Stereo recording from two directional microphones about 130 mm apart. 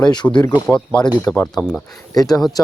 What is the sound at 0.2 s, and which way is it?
Speech, 5° left (ahead or behind).